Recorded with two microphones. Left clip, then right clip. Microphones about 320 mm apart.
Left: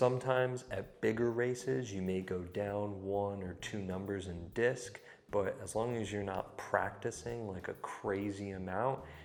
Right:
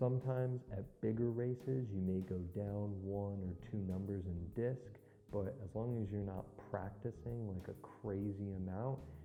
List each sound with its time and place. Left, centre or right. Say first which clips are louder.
0.0 s speech: left 9 dB; centre
3.1 s speech: left 9 dB; left
3.3 s speech: left 7 dB; centre